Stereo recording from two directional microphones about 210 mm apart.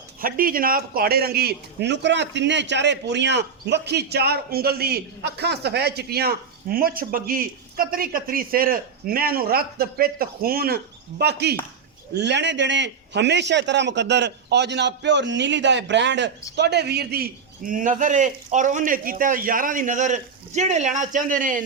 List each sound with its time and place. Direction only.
0.2 s a man's voice: 45° right (ahead or behind)